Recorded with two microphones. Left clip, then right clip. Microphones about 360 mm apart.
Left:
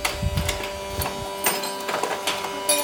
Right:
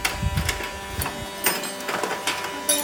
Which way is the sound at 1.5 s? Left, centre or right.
Left.